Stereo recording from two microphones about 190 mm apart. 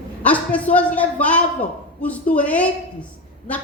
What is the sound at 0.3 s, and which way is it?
A woman's voice, 5° left (ahead or behind).